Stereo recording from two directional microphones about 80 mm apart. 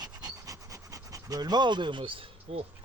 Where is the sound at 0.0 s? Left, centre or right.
Right.